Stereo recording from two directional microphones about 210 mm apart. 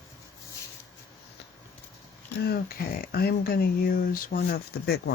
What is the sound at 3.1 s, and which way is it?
Speech, 45° left (ahead or behind).